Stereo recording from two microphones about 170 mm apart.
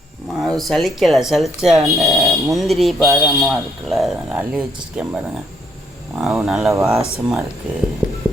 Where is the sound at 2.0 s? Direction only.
20° right (ahead or behind).